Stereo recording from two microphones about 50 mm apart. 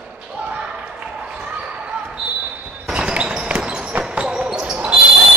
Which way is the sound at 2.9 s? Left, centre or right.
Right.